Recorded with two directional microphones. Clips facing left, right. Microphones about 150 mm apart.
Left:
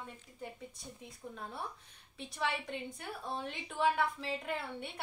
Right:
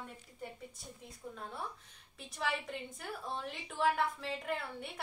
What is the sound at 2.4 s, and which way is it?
A woman's voice, centre (ahead or behind).